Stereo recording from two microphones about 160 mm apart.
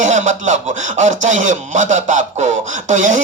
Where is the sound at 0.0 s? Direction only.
50° right (ahead or behind).